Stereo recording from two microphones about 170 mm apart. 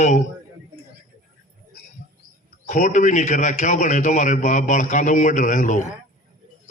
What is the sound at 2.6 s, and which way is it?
A man's voice, 45° left (ahead or behind).